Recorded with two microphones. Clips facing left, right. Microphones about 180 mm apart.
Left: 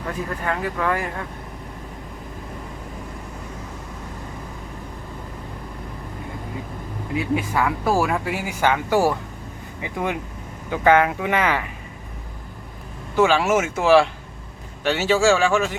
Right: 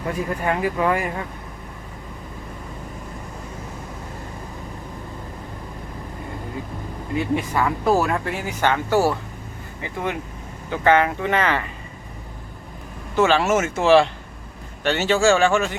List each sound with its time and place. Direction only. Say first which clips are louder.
0.4 s speech: right 3 dB; 15° right (ahead or behind)
7.2 s speech: even; 5° left (ahead or behind)
13.1 s a man's voice: even; 10° left (ahead or behind)